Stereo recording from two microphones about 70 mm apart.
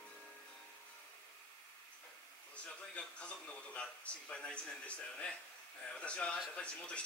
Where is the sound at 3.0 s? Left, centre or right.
Centre.